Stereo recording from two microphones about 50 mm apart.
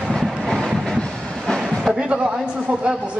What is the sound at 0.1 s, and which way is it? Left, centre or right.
Vehicle, centre.